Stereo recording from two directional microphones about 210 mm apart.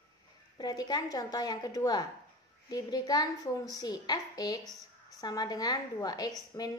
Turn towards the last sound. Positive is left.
turn(degrees=20)  # may be behind; listen again after turning